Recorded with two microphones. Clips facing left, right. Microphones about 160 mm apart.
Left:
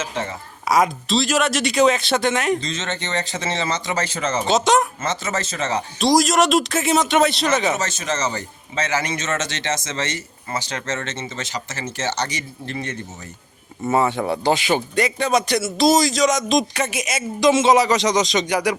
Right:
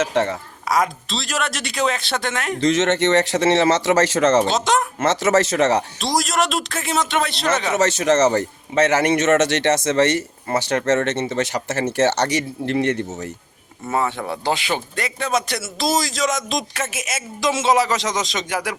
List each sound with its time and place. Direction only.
0.0 s a man's voice: 70° right (ahead or behind)
1.0 s speech: centre (ahead or behind)
2.6 s a man's voice: 75° right (ahead or behind)
4.4 s speech: centre (ahead or behind)
4.9 s a man's voice: 75° right (ahead or behind)
6.0 s speech: centre (ahead or behind)
7.7 s a man's voice: 70° right (ahead or behind)
13.9 s speech: 5° left (ahead or behind)